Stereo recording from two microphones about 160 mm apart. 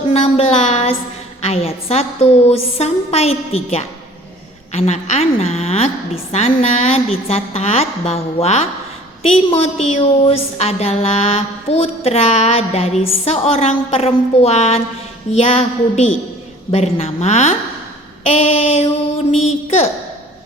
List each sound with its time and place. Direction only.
0.1 s a woman's voice: 40° left (ahead or behind)